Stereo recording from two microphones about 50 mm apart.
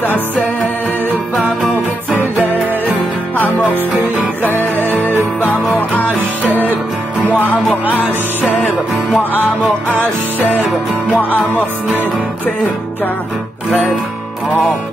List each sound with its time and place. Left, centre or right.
4.6 s music: right
5.8 s music: left
7.6 s music: right
9.1 s music: left
9.9 s music: right
11.1 s music: left